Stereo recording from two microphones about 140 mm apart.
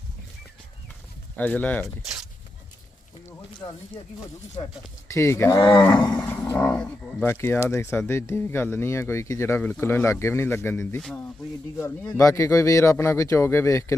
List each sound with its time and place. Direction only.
1.4 s speech: 10° left (ahead or behind)
5.1 s speech: 20° left (ahead or behind)
6.1 s roar: 15° left (ahead or behind)
7.3 s speech: 15° left (ahead or behind)